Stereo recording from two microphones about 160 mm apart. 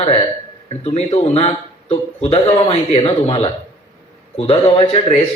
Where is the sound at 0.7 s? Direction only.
40° left (ahead or behind).